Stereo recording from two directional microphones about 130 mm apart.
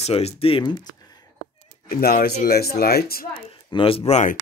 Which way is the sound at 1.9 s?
90° left.